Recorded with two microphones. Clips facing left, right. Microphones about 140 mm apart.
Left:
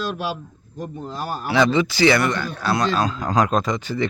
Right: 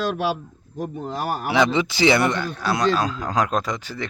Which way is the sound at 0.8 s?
65° right (ahead or behind).